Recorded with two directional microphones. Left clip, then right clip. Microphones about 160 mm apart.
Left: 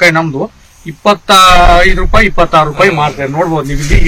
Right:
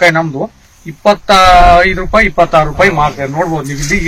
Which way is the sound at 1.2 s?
25° right (ahead or behind).